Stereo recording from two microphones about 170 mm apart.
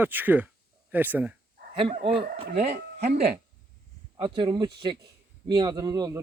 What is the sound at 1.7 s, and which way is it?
Speech, 35° right (ahead or behind).